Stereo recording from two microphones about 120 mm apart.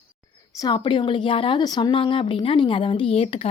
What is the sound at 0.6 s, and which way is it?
Speech, 40° left (ahead or behind).